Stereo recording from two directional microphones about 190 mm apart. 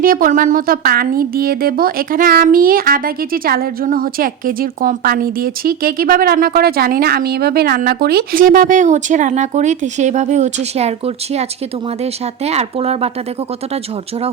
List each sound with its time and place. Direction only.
0.0 s speech: 45° right (ahead or behind)
12.5 s speech: 35° right (ahead or behind)